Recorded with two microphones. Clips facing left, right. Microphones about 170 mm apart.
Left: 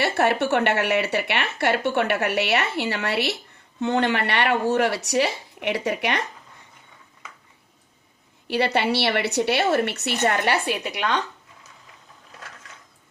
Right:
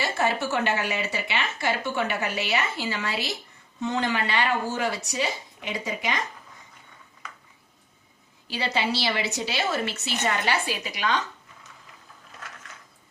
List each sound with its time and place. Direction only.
0.0 s speech: 65° left (ahead or behind)
8.4 s a woman's voice: 65° left (ahead or behind)